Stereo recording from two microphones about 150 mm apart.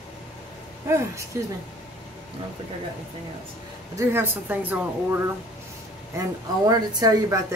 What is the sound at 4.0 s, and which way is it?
Speech, 15° right (ahead or behind).